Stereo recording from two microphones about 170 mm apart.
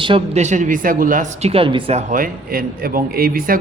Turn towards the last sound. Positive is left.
turn(degrees=-60)  # may be behind; listen again after turning